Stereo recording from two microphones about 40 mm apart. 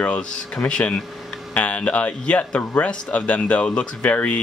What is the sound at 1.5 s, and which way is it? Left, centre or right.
Speech, left.